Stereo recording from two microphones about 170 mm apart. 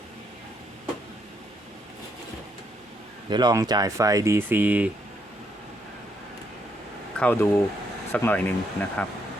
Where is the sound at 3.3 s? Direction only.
25° right (ahead or behind); by 4.9 s 10° right (ahead or behind).